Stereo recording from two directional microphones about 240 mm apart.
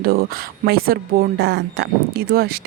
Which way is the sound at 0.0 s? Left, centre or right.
Right.